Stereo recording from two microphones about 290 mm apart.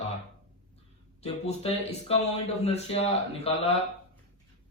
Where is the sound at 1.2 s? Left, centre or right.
Left.